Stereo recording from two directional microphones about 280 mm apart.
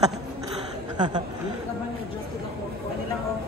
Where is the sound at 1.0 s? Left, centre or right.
Centre.